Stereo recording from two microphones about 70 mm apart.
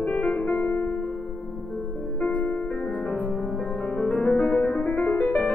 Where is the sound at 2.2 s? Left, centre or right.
Left.